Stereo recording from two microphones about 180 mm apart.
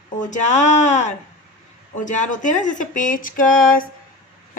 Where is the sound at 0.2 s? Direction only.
45° left (ahead or behind).